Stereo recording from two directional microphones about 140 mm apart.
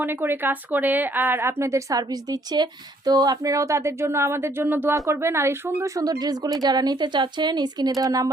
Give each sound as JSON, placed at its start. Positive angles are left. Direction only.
{"t": 0.0, "sound": "speech", "side_deg": -15}